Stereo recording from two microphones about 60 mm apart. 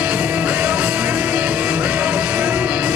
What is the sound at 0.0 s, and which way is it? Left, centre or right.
Music, right.